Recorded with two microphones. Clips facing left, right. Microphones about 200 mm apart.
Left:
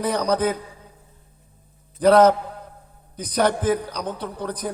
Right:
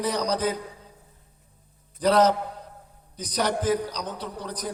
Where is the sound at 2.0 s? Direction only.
55° left (ahead or behind).